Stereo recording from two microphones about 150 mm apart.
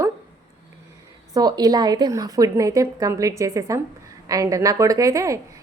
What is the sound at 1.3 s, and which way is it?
A woman's voice, 25° right (ahead or behind).